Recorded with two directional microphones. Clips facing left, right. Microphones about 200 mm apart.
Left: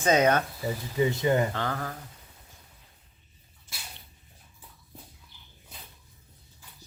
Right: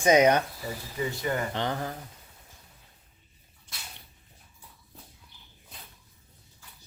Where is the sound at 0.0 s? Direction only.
15° right (ahead or behind).